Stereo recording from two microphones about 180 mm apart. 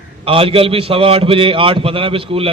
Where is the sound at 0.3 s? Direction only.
30° right (ahead or behind).